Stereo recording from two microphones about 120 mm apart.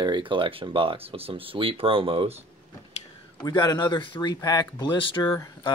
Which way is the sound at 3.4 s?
35° left (ahead or behind).